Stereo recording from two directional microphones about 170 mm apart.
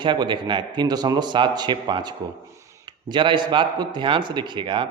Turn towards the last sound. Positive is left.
turn(degrees=-30)  # may be behind; listen again after turning